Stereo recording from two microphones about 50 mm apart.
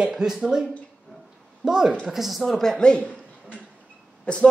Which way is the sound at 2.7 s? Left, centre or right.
Centre.